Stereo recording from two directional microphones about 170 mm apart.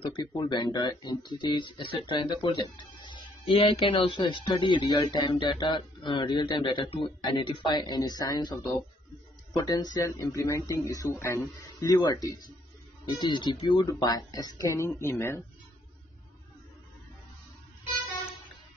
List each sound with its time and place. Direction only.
0.0 s speech: 25° left (ahead or behind)
9.7 s speech: 20° left (ahead or behind)